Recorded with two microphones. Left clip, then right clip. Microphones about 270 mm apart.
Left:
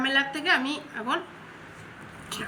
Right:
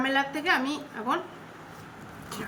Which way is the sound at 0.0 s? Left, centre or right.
Centre.